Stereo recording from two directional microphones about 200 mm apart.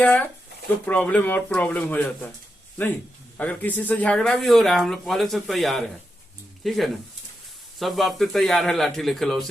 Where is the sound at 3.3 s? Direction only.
5° left (ahead or behind).